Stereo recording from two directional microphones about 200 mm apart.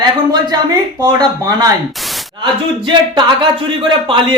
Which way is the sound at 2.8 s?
25° right (ahead or behind).